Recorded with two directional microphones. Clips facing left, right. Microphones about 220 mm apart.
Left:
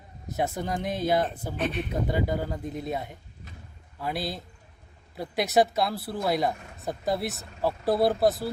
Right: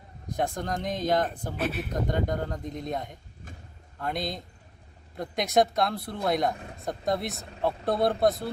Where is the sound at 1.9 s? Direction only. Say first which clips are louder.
Left 1 dB; 5° left (ahead or behind).